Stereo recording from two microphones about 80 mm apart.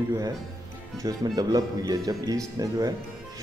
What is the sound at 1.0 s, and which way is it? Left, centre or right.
Speech, right.